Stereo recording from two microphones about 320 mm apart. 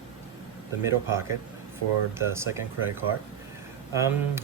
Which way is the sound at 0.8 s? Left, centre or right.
Centre.